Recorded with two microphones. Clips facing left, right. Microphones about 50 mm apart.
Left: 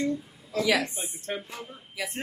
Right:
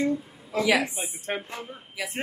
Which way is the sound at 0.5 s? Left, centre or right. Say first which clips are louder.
Right 2 dB; centre.